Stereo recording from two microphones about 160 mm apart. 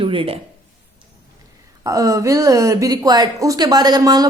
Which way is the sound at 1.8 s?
20° right (ahead or behind).